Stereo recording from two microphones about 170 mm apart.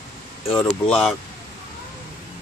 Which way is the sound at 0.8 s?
5° left (ahead or behind).